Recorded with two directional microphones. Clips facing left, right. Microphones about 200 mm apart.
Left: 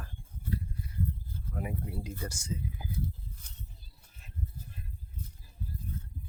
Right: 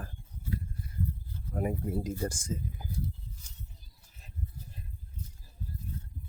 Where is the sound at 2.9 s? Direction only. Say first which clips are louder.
Even; 55° left (ahead or behind).